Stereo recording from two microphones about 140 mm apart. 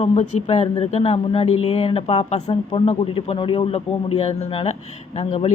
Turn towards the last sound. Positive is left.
turn(degrees=50)  # may be behind; listen again after turning